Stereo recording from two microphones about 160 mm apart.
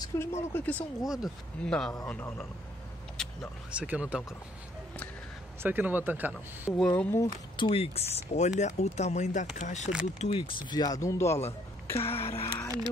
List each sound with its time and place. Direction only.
0.1 s speech: 20° left (ahead or behind)
1.0 s speech: centre (ahead or behind)
3.2 s a sound: 5° left (ahead or behind)
3.7 s speech: 10° right (ahead or behind)
5.6 s speech: 10° right (ahead or behind)
6.8 s speech: 10° left (ahead or behind)
7.5 s speech: 35° left (ahead or behind)
12.0 s a sound: 40° left (ahead or behind)
12.4 s speech: 20° left (ahead or behind)